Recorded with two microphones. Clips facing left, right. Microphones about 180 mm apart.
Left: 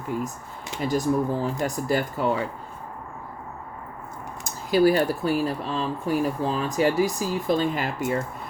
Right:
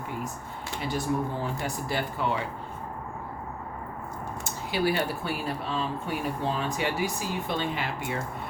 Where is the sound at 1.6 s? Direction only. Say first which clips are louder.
Left 6 dB; 45° left (ahead or behind).